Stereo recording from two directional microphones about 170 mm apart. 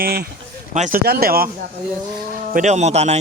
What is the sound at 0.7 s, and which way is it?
Speech, 45° right (ahead or behind).